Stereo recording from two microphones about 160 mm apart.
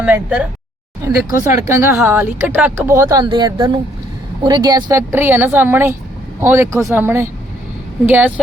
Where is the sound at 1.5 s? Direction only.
15° right (ahead or behind).